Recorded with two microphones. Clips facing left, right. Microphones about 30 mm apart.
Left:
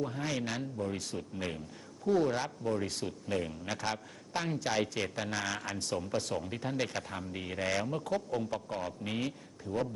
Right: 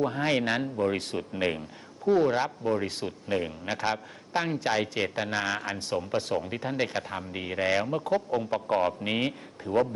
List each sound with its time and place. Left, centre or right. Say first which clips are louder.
0.0 s speech: right 9 dB; right
2.0 s speech: right 6 dB; right
8.6 s speech: right 11 dB; right